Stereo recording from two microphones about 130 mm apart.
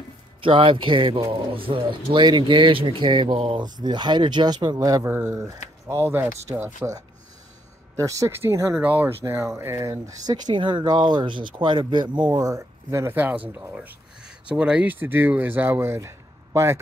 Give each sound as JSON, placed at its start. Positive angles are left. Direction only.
{"t": 0.4, "sound": "speech", "side_deg": -40}
{"t": 7.9, "sound": "speech", "side_deg": -25}
{"t": 9.2, "sound": "speech", "side_deg": -25}
{"t": 13.7, "sound": "a sound", "side_deg": -5}
{"t": 14.5, "sound": "speech", "side_deg": -10}